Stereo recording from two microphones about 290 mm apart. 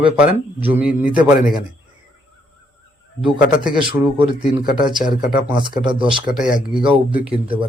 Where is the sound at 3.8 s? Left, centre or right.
Centre.